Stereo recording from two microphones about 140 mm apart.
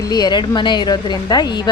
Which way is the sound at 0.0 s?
30° left (ahead or behind).